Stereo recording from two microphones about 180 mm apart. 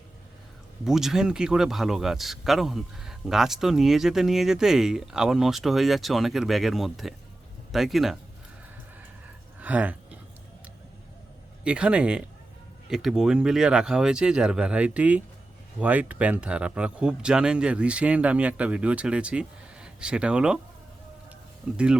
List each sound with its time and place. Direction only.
0.9 s speech: centre (ahead or behind)
9.6 s a sound: 10° right (ahead or behind)
11.6 s speech: 5° right (ahead or behind)